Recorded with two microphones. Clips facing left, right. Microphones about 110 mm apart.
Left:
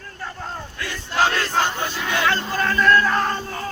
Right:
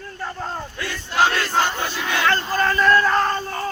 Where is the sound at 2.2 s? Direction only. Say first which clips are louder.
Right 2 dB; 5° left (ahead or behind).